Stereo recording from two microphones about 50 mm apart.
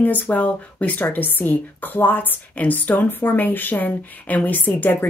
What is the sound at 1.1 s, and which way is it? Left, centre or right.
A woman's voice, left.